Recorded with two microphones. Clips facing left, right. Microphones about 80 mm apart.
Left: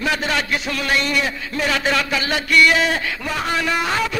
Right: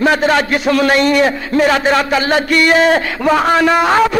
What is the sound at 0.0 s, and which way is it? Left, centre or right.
A man's voice, right.